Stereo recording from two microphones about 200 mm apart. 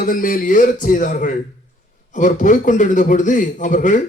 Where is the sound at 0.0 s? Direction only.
45° left (ahead or behind).